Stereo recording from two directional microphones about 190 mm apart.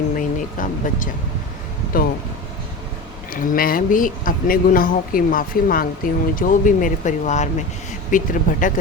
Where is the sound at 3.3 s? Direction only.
50° left (ahead or behind).